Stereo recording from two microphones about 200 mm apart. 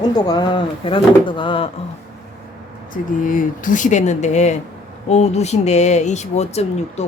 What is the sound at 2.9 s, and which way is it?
Speech, 40° left (ahead or behind).